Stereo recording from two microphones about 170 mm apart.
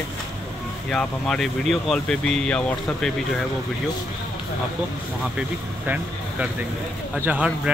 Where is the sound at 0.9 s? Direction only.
5° left (ahead or behind).